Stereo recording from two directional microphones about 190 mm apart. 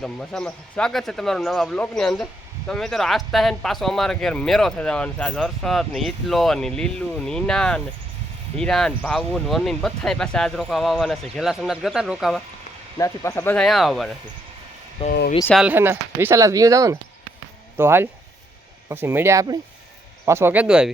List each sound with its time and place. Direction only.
0.0 s speech: 5° left (ahead or behind)
13.0 s speech: 15° left (ahead or behind); by 14.2 s centre (ahead or behind)
15.0 s speech: 30° left (ahead or behind)
15.5 s speech: 10° right (ahead or behind)